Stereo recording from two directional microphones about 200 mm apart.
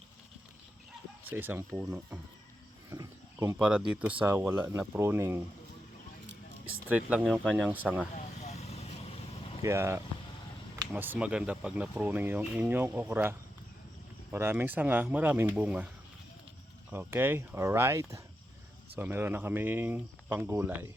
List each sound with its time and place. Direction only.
1.2 s speech: 10° right (ahead or behind)
6.8 s speech: 5° right (ahead or behind)
8.1 s vehicle: 35° left (ahead or behind)
9.6 s speech: 15° right (ahead or behind)
14.3 s speech: 10° right (ahead or behind)
16.9 s speech: 10° right (ahead or behind)